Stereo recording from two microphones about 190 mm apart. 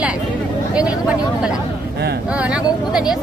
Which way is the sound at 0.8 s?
5° right (ahead or behind).